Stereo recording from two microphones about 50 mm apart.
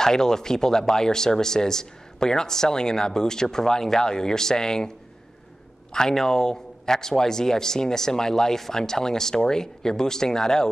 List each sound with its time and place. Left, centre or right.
0.0 s speech: centre
5.9 s speech: centre